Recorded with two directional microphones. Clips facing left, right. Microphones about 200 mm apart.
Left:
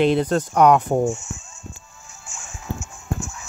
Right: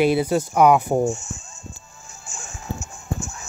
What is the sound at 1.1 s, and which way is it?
Speech, 40° right (ahead or behind).